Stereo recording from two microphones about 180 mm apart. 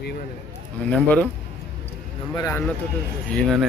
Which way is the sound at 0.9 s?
5° left (ahead or behind).